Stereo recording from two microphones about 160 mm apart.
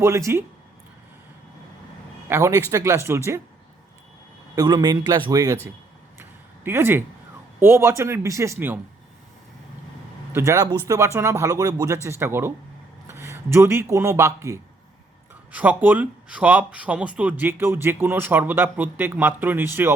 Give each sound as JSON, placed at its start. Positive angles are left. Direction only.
{"t": 0.0, "sound": "speech", "side_deg": -20}
{"t": 2.2, "sound": "speech", "side_deg": -15}
{"t": 4.5, "sound": "speech", "side_deg": -25}
{"t": 6.7, "sound": "speech", "side_deg": -15}
{"t": 10.3, "sound": "speech", "side_deg": -15}